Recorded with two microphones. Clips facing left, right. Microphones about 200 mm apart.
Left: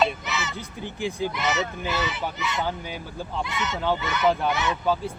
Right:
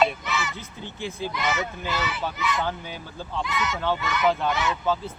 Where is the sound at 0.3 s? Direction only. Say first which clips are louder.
Right 1 dB; 20° left (ahead or behind).